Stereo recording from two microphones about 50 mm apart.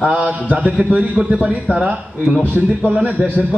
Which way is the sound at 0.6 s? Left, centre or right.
Centre.